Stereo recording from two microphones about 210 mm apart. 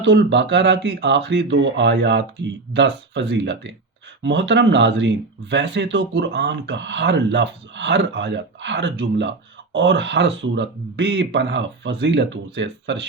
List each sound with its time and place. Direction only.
0.0 s speech: 55° right (ahead or behind)